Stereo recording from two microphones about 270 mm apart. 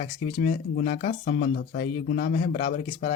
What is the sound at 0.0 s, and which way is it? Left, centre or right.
Speech, left.